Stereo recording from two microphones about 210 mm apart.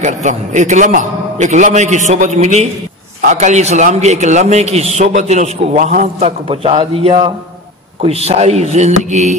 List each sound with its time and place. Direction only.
0.0 s a man's voice: 35° right (ahead or behind)